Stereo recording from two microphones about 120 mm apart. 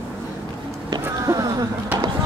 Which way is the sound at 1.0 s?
25° right (ahead or behind).